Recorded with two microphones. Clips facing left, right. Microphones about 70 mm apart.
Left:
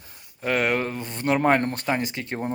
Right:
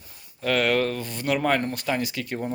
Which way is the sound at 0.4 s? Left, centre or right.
Centre.